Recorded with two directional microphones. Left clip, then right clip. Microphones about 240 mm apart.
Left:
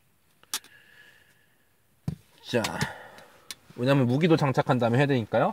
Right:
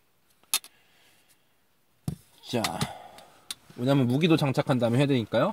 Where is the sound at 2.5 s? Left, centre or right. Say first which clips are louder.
Left 2 dB; left.